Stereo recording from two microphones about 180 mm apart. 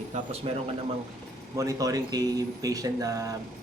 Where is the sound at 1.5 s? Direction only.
20° right (ahead or behind).